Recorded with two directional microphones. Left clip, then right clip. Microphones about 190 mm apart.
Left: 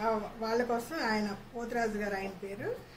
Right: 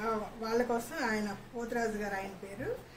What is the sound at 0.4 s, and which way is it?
A woman's voice, 20° left (ahead or behind).